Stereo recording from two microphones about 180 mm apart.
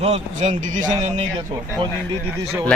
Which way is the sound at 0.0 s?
40° right (ahead or behind).